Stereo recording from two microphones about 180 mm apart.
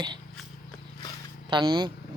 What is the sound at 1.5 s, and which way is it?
Speech, 25° right (ahead or behind).